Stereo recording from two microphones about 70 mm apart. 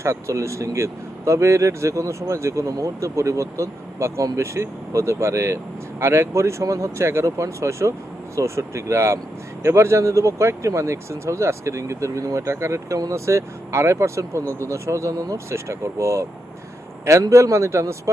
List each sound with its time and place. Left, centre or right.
0.0 s speech: right